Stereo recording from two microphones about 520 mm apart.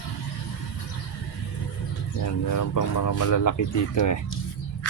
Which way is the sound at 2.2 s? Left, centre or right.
Left.